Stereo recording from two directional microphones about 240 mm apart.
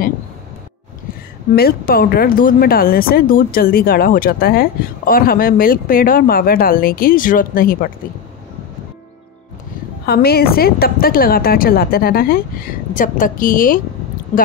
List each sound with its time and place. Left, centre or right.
1.5 s speech: left
10.0 s speech: left